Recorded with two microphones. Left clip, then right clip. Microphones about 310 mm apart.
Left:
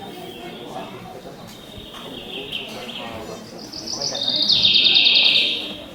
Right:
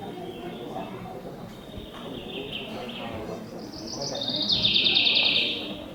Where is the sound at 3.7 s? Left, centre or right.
Centre.